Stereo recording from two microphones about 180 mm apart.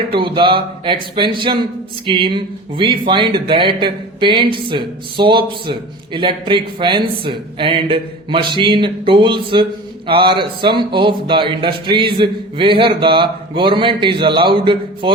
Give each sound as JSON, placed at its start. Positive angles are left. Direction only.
{"t": 0.2, "sound": "speech", "side_deg": -25}